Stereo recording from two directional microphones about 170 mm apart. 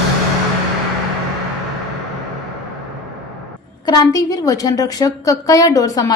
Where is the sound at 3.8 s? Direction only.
25° left (ahead or behind).